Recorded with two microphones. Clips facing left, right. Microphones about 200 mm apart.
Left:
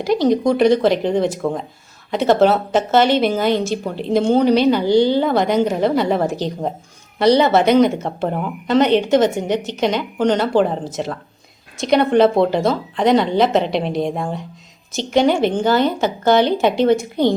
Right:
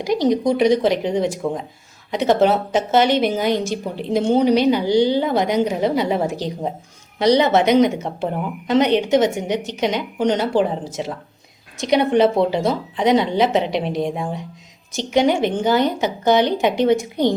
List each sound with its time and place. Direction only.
0.0 s a woman's voice: 15° right (ahead or behind)
2.0 s a woman's voice: 15° right (ahead or behind)